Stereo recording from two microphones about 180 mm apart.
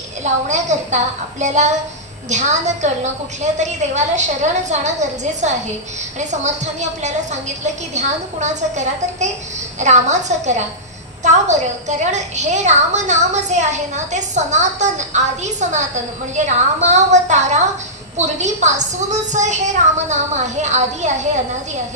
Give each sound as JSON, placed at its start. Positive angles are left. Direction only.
{"t": 0.2, "sound": "a woman's voice", "side_deg": -40}